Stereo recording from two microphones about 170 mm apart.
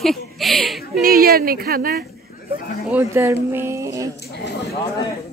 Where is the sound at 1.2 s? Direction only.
60° right (ahead or behind).